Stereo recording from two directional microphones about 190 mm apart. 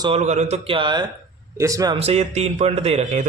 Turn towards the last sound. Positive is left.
turn(degrees=-35)  # may be behind; listen again after turning